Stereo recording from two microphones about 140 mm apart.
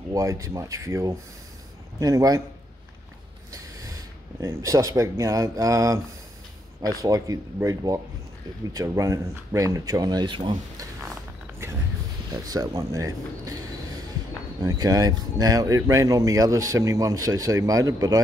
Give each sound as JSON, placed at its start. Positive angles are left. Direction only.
{"t": 0.1, "sound": "speech", "side_deg": -25}
{"t": 4.4, "sound": "speech", "side_deg": -20}
{"t": 12.4, "sound": "speech", "side_deg": -25}